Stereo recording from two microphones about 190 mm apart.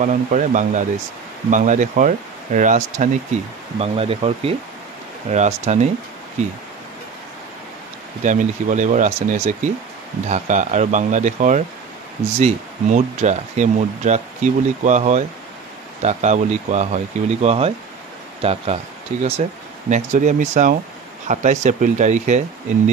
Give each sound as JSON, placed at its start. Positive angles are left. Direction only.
{"t": 0.0, "sound": "speech", "side_deg": -40}
{"t": 3.8, "sound": "speech", "side_deg": -30}
{"t": 8.2, "sound": "speech", "side_deg": -40}